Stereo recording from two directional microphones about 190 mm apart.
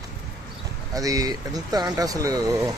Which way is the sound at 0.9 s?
20° right (ahead or behind).